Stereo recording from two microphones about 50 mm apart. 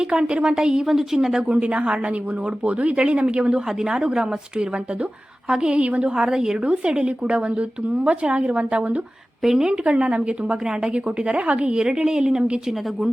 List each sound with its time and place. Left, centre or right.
0.0 s a woman's voice: centre
1.4 s a woman's voice: right
9.4 s a woman's voice: centre